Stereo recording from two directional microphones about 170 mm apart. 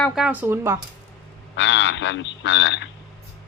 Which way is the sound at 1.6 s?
90° left.